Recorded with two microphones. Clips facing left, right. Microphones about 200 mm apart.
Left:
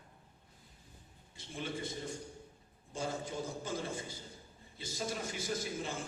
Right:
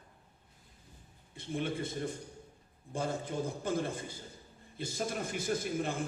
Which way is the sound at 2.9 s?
55° right (ahead or behind).